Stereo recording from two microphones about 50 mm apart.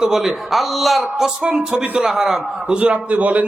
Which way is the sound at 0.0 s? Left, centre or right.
Centre.